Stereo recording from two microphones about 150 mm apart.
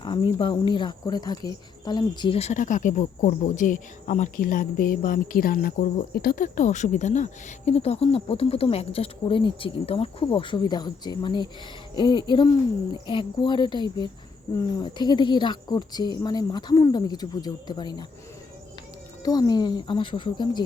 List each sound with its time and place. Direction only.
0.0 s speech: 30° left (ahead or behind)
2.4 s speech: 55° left (ahead or behind); by 18.0 s 30° left (ahead or behind)
19.2 s speech: 25° left (ahead or behind)